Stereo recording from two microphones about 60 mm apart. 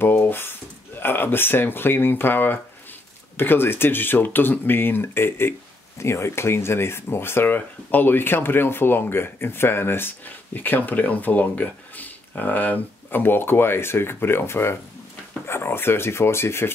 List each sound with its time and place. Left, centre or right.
0.0 s speech: left